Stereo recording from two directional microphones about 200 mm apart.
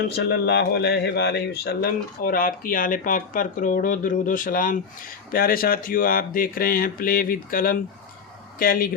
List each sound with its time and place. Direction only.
0.2 s speech: 55° left (ahead or behind)